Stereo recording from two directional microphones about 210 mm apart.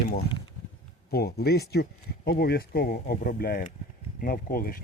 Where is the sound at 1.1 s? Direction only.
50° left (ahead or behind).